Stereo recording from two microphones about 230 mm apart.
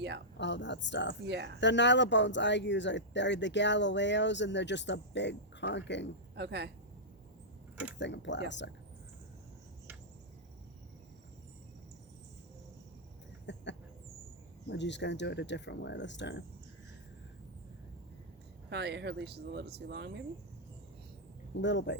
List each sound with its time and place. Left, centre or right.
0.3 s speech: left
1.3 s speech: right
1.6 s speech: left
6.3 s speech: right
7.9 s speech: left
13.5 s a sound: left
14.7 s speech: left
18.7 s speech: right
21.6 s speech: left